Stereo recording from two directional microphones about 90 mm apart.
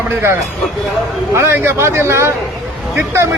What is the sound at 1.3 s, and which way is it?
A man's voice, 30° right (ahead or behind).